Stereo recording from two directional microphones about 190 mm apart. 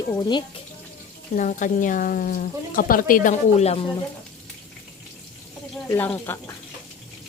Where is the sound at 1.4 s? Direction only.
40° left (ahead or behind).